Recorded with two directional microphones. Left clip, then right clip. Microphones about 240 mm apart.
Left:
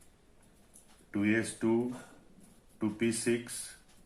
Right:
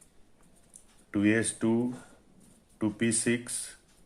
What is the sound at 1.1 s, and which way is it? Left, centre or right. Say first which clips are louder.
Speech: right 4 dB; right.